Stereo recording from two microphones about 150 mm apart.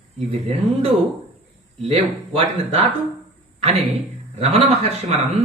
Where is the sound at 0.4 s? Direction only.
40° right (ahead or behind).